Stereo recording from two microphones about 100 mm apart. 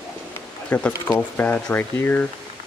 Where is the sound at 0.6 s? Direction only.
15° left (ahead or behind).